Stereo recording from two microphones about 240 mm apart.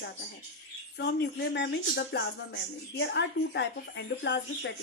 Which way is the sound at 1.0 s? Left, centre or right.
Left.